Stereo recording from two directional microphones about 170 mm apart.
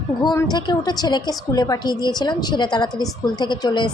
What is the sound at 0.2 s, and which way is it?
A woman's voice, 25° left (ahead or behind).